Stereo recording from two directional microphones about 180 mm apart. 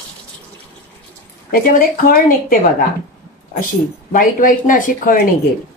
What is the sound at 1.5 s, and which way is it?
A woman's voice, 55° left (ahead or behind).